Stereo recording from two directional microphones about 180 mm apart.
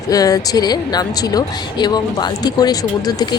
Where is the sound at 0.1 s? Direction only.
20° left (ahead or behind).